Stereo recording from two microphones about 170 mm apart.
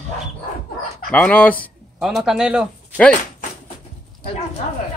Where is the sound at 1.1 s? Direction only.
10° left (ahead or behind).